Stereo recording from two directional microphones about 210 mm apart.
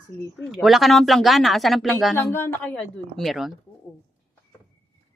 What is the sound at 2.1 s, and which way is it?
Speech, 10° left (ahead or behind).